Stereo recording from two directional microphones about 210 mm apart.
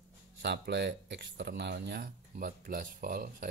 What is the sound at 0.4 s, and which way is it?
Speech, 55° right (ahead or behind).